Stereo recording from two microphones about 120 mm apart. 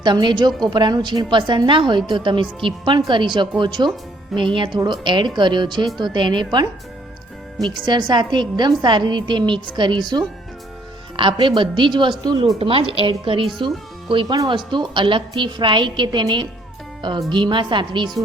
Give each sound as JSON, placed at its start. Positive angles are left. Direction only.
{"t": 0.0, "sound": "a woman's voice", "side_deg": -40}
{"t": 12.5, "sound": "a woman's voice", "side_deg": -50}